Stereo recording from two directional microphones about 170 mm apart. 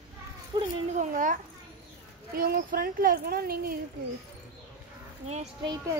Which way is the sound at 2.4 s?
60° right (ahead or behind).